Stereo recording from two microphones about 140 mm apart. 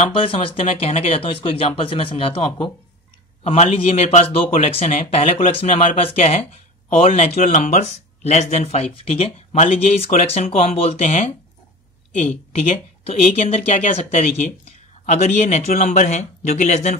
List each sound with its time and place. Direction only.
0.1 s speech: 40° left (ahead or behind)
7.4 s speech: 65° left (ahead or behind)
12.5 s speech: 50° left (ahead or behind)